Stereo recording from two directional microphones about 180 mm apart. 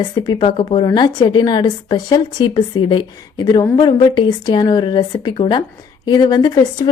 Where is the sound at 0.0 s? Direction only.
20° left (ahead or behind).